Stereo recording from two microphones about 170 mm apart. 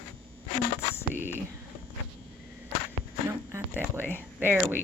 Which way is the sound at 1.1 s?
10° right (ahead or behind).